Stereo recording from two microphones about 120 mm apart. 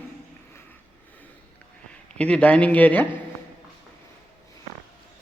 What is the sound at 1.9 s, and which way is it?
A man's voice, 10° left (ahead or behind).